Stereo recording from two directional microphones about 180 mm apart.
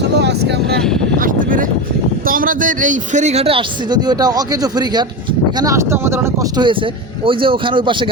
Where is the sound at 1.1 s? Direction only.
50° right (ahead or behind); by 6.1 s 15° right (ahead or behind).